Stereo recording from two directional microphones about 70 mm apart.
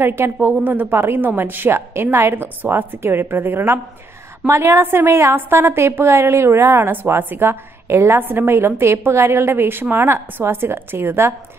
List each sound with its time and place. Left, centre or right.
0.0 s a woman's voice: right